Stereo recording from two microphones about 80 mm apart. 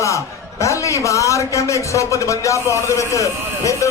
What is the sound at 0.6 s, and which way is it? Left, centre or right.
A man's voice, left.